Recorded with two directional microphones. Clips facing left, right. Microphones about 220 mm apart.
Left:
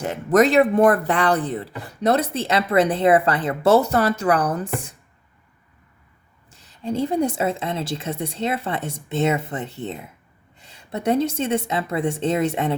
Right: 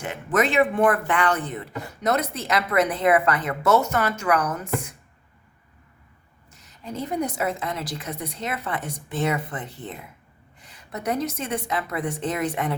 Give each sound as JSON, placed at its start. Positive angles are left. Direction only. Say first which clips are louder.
{"t": 0.0, "sound": "speech", "louder": "left 7 dB", "side_deg": 40}
{"t": 6.5, "sound": "a woman's voice", "louder": "left 9 dB", "side_deg": 30}